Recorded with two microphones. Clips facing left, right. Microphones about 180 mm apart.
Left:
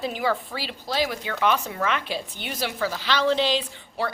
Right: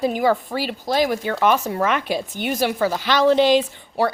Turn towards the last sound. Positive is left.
turn(degrees=-45)  # may be behind; listen again after turning